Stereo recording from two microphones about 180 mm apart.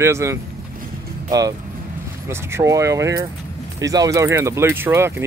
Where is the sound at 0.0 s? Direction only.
15° right (ahead or behind).